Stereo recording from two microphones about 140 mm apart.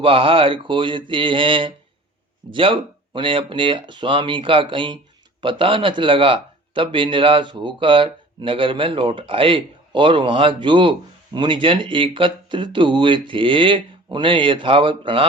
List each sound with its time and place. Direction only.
0.0 s speech: 40° right (ahead or behind)